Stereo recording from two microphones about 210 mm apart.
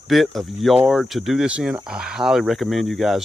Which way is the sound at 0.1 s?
Centre (ahead or behind).